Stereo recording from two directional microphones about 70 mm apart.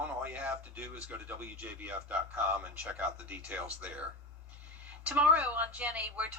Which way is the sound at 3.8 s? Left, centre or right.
Centre.